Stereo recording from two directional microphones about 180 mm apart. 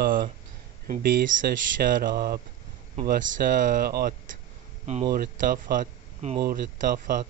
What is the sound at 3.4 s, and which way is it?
Speech, 50° right (ahead or behind).